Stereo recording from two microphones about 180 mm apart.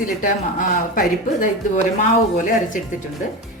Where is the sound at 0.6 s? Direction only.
50° left (ahead or behind).